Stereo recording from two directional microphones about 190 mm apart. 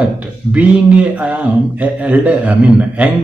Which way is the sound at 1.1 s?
5° right (ahead or behind).